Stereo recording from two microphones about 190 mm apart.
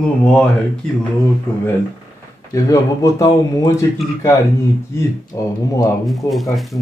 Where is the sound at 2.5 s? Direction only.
15° left (ahead or behind).